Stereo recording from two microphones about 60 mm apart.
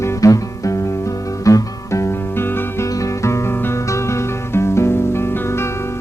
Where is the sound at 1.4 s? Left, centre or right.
Left.